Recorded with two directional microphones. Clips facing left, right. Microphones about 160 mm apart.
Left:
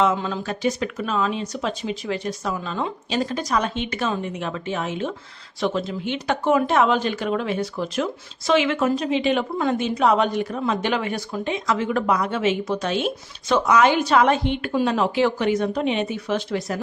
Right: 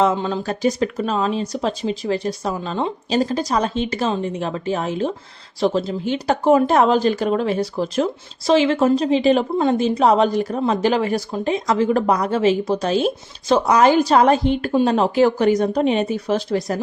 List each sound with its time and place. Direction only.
0.0 s speech: 35° right (ahead or behind)